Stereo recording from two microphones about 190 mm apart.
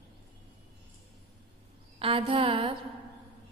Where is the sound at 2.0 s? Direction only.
30° right (ahead or behind).